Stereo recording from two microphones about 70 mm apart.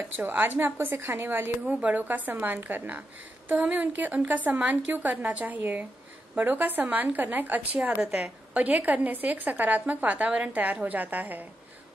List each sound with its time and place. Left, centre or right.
0.2 s a woman's voice: right
1.7 s a woman's voice: centre